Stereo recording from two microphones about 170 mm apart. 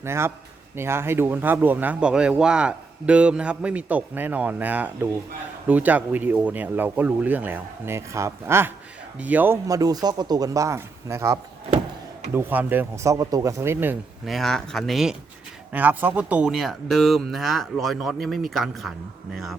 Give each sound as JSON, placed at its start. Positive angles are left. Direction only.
{"t": 0.0, "sound": "speech", "side_deg": -15}
{"t": 14.3, "sound": "speech", "side_deg": 0}